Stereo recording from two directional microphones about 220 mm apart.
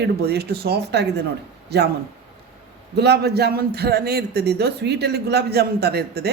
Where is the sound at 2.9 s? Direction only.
50° right (ahead or behind).